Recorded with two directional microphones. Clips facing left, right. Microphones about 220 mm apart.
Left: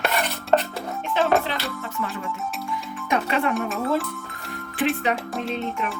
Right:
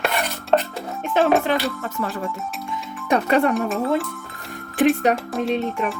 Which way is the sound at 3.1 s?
45° right (ahead or behind).